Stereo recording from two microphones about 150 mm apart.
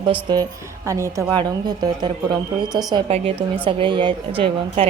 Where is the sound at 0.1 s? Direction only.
30° right (ahead or behind).